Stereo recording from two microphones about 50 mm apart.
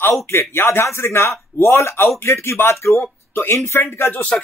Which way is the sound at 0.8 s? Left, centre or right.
Left.